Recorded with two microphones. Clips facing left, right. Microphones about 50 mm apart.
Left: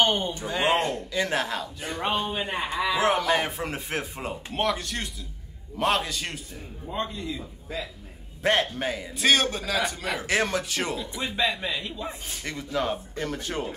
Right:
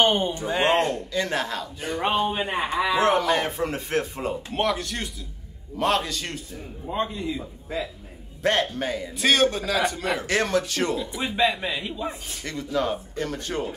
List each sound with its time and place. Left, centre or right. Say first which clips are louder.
0.0 s speech: right 3 dB; centre
0.7 s a man's voice: right 1 dB; centre
2.0 s speech: right 4 dB; centre
3.0 s a man's voice: right 2 dB; centre
6.9 s speech: right 4 dB; centre
8.4 s a man's voice: right 1 dB; centre
11.1 s speech: right 3 dB; centre
12.4 s speech: right 2 dB; centre